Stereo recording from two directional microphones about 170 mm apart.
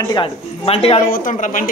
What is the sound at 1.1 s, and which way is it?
Speech, 50° left (ahead or behind).